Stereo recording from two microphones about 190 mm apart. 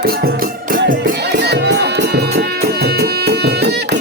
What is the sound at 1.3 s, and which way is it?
Music, 65° right (ahead or behind).